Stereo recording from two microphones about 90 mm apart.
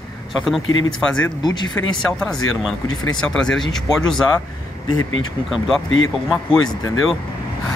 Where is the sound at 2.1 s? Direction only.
5° left (ahead or behind).